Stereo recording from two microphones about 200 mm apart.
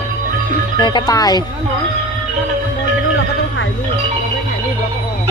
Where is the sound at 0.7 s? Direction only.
20° left (ahead or behind).